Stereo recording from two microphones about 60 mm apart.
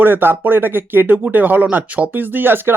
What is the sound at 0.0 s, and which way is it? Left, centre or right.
Speech, right.